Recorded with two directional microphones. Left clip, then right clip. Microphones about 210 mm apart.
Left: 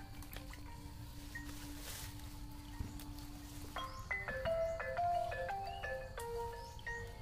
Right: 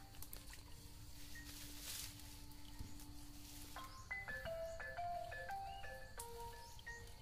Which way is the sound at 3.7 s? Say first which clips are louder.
Left 8 dB; 55° left (ahead or behind).